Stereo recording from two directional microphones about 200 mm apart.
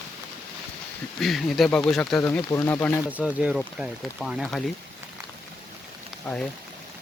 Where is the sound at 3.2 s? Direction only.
5° right (ahead or behind).